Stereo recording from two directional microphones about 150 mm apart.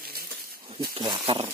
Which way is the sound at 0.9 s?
35° right (ahead or behind).